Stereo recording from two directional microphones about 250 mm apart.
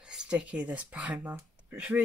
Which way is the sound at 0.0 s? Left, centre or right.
Centre.